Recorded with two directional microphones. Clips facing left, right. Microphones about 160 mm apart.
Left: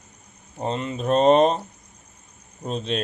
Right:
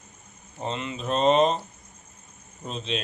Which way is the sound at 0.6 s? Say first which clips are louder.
Left 5 dB; 45° left (ahead or behind).